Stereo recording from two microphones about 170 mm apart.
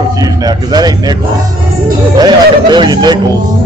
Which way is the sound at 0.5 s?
25° right (ahead or behind).